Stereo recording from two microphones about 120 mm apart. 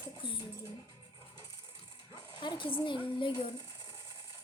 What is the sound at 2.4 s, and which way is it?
A child's voice, 40° left (ahead or behind).